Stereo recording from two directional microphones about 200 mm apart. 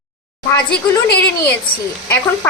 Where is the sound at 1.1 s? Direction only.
55° left (ahead or behind).